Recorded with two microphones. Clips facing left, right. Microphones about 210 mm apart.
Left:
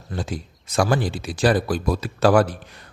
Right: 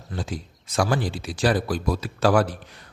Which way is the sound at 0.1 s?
50° left (ahead or behind).